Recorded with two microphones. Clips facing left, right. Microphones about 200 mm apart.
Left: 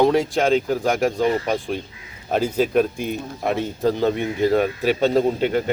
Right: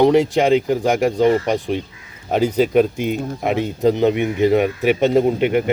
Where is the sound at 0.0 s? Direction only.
20° right (ahead or behind).